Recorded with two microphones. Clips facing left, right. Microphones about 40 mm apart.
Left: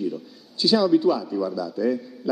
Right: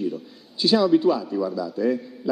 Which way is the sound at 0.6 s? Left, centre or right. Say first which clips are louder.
Right 1 dB; centre.